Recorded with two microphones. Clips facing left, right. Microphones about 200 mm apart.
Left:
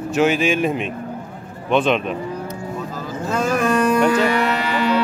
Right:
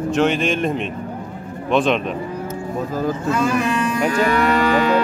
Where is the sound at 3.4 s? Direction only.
45° left (ahead or behind).